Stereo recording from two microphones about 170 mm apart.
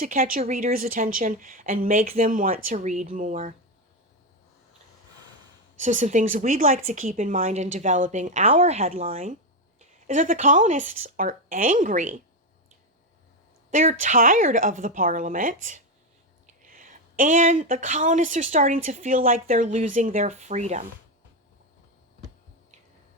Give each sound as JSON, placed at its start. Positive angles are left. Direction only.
{"t": 0.0, "sound": "a woman's voice", "side_deg": -55}
{"t": 5.8, "sound": "speech", "side_deg": -50}
{"t": 13.7, "sound": "speech", "side_deg": -45}